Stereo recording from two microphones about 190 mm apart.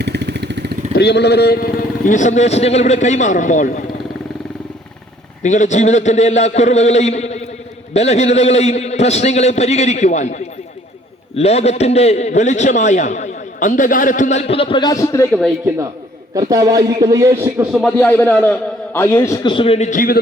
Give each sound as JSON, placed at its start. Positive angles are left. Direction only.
{"t": 0.0, "sound": "vehicle", "side_deg": -60}
{"t": 0.9, "sound": "a man's voice", "side_deg": 60}
{"t": 5.4, "sound": "a man's voice", "side_deg": 40}
{"t": 16.3, "sound": "a man's voice", "side_deg": -20}
{"t": 17.7, "sound": "speech", "side_deg": 0}
{"t": 17.9, "sound": "a man's voice", "side_deg": 10}
{"t": 19.4, "sound": "a man's voice", "side_deg": 25}